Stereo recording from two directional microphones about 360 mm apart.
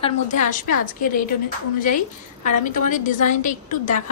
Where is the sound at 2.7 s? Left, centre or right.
Left.